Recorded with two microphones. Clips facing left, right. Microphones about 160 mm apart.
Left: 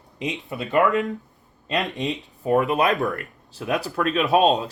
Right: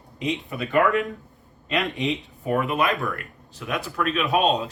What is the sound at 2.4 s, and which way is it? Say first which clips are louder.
Speech: left 3 dB; 35° left (ahead or behind).